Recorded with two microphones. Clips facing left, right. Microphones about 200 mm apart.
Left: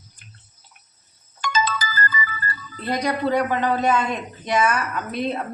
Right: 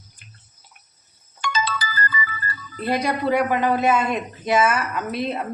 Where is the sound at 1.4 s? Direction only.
40° left (ahead or behind).